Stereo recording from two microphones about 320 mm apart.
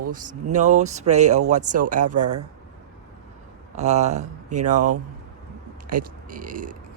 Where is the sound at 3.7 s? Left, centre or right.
Right.